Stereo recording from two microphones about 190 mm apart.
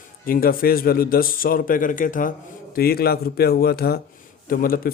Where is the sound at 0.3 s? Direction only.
50° left (ahead or behind).